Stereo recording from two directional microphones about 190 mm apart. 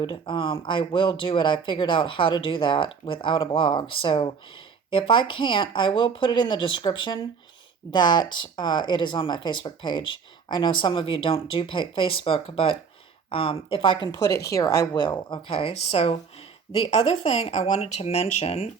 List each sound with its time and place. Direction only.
0.0 s a woman's voice: 25° left (ahead or behind)